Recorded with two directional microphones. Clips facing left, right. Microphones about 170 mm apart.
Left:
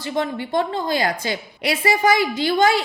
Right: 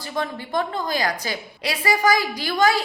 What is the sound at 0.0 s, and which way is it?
A woman's voice, 25° left (ahead or behind).